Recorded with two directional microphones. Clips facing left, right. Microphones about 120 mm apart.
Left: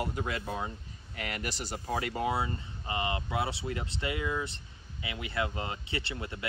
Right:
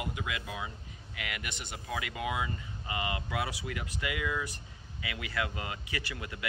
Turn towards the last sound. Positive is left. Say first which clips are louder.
# left 2 dB
turn(degrees=30)  # may be behind; listen again after turning